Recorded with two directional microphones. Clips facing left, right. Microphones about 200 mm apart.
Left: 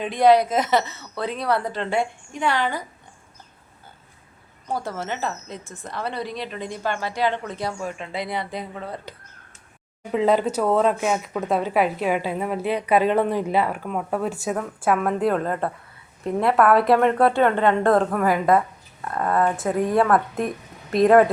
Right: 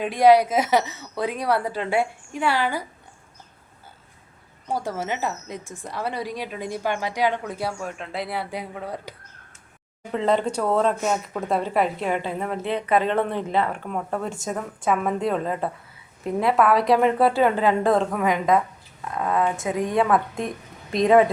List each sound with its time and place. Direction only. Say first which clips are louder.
0.0 s speech: right 1 dB; 10° right (ahead or behind)
4.7 s speech: right 1 dB; 10° right (ahead or behind)
10.1 s speech: left 2 dB; 5° left (ahead or behind)